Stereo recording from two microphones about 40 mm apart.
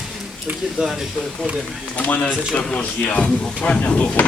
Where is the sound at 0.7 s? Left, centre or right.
Centre.